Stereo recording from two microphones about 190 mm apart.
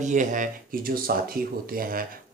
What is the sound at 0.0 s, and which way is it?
Speech, 40° right (ahead or behind).